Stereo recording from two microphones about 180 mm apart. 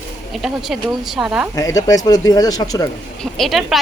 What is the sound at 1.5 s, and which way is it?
Speech, 15° left (ahead or behind).